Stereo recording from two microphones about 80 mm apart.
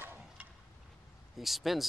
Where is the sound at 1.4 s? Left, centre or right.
Centre.